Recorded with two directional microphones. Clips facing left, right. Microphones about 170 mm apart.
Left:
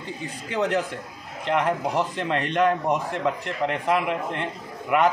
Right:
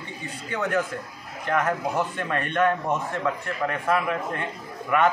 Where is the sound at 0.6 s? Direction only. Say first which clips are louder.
Left 2 dB; 20° left (ahead or behind).